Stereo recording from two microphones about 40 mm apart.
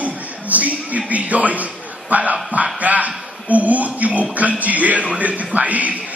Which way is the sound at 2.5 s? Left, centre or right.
Right.